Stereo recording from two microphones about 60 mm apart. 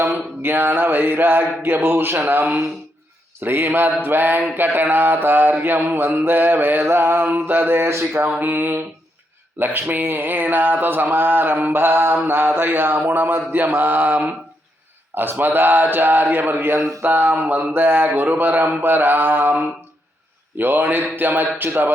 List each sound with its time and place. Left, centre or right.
0.4 s speech: right
6.8 s mantra: right
7.3 s speech: right
8.4 s speech: right
20.6 s speech: right